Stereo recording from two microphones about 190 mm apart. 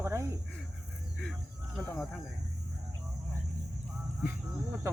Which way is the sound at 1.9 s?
Centre (ahead or behind).